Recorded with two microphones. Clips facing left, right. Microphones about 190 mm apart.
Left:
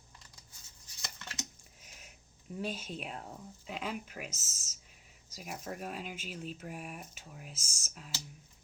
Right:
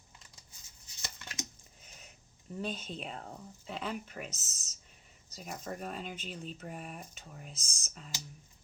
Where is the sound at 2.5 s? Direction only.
5° left (ahead or behind).